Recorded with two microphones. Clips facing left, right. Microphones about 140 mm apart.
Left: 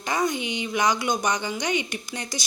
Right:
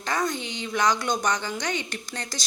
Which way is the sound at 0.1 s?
15° left (ahead or behind).